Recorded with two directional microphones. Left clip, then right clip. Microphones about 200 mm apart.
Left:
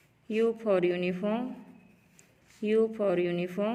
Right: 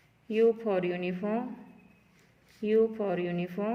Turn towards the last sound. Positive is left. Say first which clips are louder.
# left 3 dB
turn(degrees=45)  # may be behind; listen again after turning